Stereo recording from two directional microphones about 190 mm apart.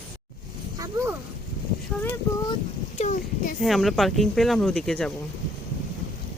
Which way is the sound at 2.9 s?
40° left (ahead or behind).